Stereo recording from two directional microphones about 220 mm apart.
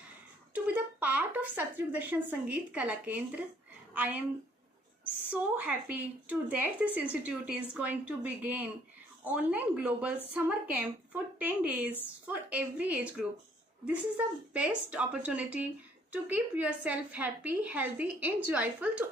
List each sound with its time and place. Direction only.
0.7 s a woman's voice: 5° right (ahead or behind)
5.3 s a woman's voice: 5° right (ahead or behind)